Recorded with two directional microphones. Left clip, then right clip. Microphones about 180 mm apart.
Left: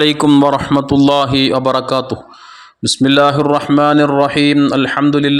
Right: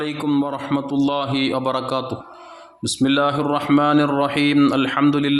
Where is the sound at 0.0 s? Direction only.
55° left (ahead or behind).